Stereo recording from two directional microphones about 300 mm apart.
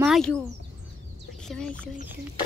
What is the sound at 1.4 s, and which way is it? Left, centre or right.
Speech, centre.